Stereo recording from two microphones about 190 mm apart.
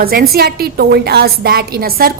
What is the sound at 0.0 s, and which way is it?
A woman's voice, 50° right (ahead or behind).